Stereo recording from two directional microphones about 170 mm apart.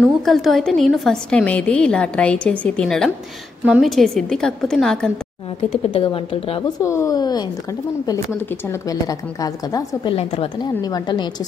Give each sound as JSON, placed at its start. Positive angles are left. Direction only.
{"t": 0.2, "sound": "a woman's voice", "side_deg": 0}
{"t": 5.7, "sound": "speech", "side_deg": 35}
{"t": 6.8, "sound": "a woman's voice", "side_deg": 15}
{"t": 8.8, "sound": "a woman's voice", "side_deg": 20}
{"t": 10.1, "sound": "a woman's voice", "side_deg": 35}